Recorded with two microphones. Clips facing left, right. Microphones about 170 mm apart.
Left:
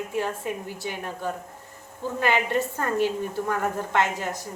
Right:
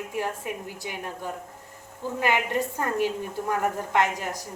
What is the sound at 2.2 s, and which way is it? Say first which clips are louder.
A woman's voice: left 1 dB; 15° right (ahead or behind).